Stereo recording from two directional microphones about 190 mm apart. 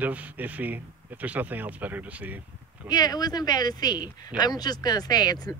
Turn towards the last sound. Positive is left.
turn(degrees=20)  # may be behind; listen again after turning